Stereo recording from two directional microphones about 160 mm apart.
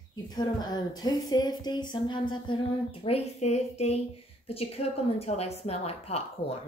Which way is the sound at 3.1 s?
40° left (ahead or behind).